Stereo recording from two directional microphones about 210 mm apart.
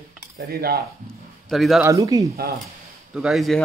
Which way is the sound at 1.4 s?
Centre (ahead or behind).